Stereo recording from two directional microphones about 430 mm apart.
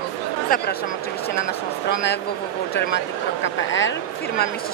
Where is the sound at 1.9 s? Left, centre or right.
Left.